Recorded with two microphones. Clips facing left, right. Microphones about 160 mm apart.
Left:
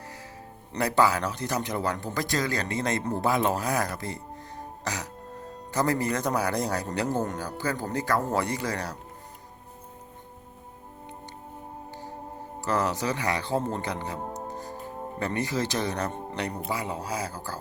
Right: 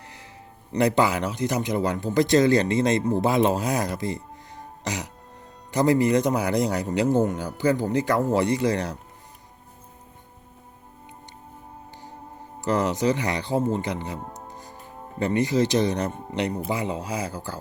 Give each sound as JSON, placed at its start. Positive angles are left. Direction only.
{"t": 0.7, "sound": "a man's voice", "side_deg": -20}
{"t": 4.8, "sound": "music", "side_deg": -20}
{"t": 5.7, "sound": "a man's voice", "side_deg": -20}
{"t": 12.6, "sound": "speech", "side_deg": -20}
{"t": 14.2, "sound": "speech", "side_deg": 30}
{"t": 15.2, "sound": "a man's voice", "side_deg": -15}